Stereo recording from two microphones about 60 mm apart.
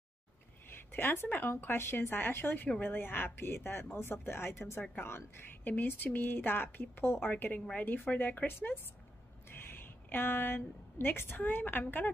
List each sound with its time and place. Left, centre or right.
0.7 s a woman's voice: left
5.6 s a woman's voice: left